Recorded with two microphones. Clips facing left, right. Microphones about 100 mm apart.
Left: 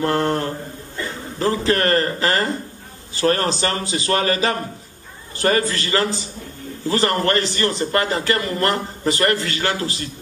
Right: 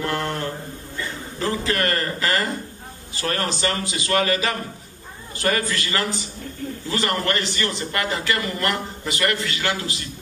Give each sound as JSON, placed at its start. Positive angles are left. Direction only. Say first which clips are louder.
{"t": 0.0, "sound": "speech", "louder": "left 6 dB", "side_deg": 35}